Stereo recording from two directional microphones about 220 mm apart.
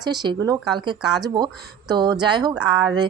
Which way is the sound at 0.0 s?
20° right (ahead or behind).